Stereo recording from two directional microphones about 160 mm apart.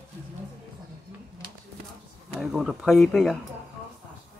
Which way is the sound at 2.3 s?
Centre (ahead or behind).